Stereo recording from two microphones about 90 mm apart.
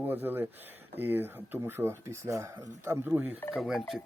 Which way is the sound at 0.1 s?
20° right (ahead or behind).